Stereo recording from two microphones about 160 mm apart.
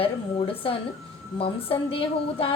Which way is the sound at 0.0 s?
35° left (ahead or behind).